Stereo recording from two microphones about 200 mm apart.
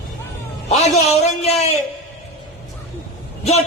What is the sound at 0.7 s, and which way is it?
A man's voice, 35° left (ahead or behind).